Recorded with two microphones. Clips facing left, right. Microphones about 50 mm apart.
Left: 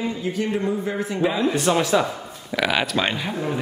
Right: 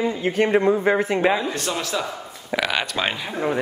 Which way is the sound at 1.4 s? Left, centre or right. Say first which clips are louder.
Left 6 dB; centre.